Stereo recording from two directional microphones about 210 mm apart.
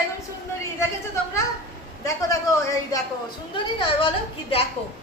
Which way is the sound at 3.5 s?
25° left (ahead or behind).